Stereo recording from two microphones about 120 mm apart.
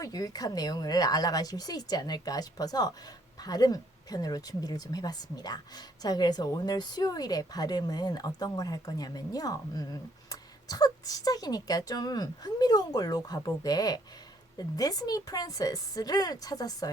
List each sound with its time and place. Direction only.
0.0 s speech: 30° left (ahead or behind)